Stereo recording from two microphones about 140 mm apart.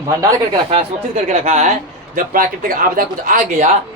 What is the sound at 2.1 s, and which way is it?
Speech, 85° right.